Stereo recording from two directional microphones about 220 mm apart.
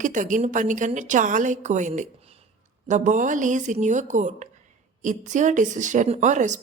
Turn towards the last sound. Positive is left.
turn(degrees=-35)  # may be behind; listen again after turning